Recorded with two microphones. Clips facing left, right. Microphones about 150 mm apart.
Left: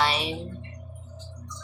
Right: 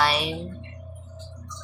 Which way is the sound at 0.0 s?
25° left (ahead or behind).